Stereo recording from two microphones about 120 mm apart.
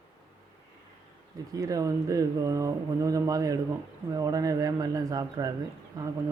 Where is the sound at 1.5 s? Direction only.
30° right (ahead or behind).